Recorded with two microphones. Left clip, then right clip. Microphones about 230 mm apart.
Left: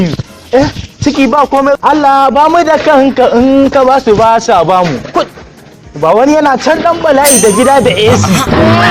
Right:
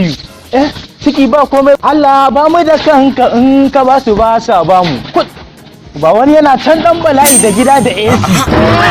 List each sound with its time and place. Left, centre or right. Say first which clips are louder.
0.5 s speech: left 2 dB; left
1.8 s speech: even; centre
8.1 s speech: even; centre